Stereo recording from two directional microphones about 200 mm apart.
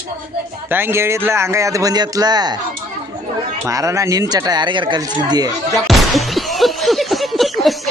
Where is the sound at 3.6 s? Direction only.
15° right (ahead or behind).